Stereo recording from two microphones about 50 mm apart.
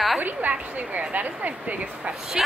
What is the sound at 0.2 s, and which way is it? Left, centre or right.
Speech, right.